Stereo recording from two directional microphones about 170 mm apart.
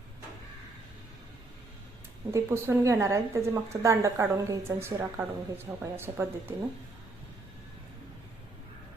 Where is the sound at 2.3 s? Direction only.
15° right (ahead or behind).